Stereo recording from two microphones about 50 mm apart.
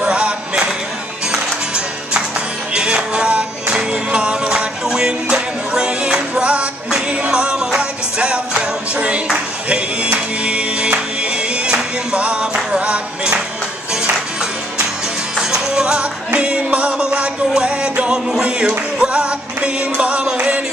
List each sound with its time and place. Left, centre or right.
0.0 s music: right
2.7 s music: centre
15.3 s music: centre